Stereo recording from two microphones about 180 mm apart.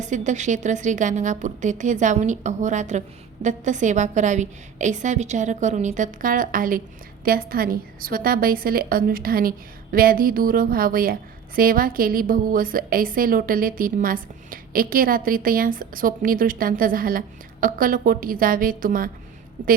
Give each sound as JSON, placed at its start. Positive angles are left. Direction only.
{"t": 0.0, "sound": "a woman's voice", "side_deg": -45}